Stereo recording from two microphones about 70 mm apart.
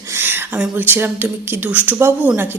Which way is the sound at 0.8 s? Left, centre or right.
Right.